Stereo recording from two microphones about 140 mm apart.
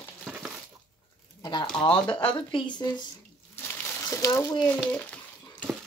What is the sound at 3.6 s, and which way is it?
Crumpling, 15° left (ahead or behind).